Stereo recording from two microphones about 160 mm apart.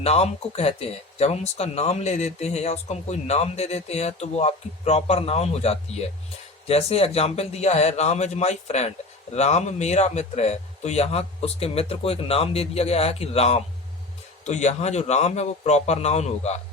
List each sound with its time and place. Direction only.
0.0 s a man's voice: 40° left (ahead or behind)